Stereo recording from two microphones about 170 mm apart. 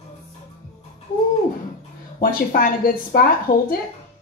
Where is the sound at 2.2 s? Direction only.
55° left (ahead or behind).